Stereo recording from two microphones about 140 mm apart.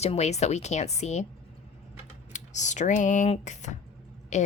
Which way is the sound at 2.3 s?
60° left (ahead or behind).